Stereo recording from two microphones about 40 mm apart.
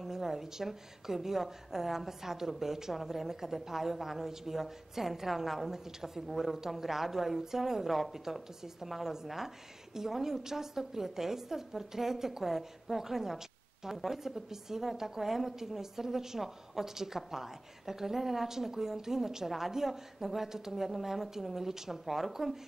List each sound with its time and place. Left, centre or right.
0.0 s a woman's voice: centre